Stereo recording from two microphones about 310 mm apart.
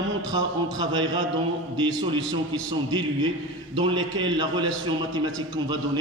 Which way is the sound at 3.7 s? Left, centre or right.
Centre.